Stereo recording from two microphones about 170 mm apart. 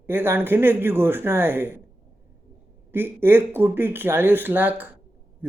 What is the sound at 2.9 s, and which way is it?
Speech, 15° right (ahead or behind).